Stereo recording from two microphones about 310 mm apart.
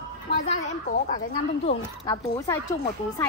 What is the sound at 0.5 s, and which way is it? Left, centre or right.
A woman's voice, left.